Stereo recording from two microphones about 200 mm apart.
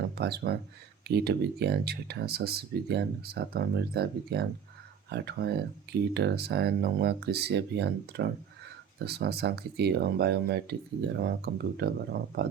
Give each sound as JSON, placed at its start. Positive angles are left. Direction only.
{"t": 0.2, "sound": "speech", "side_deg": -55}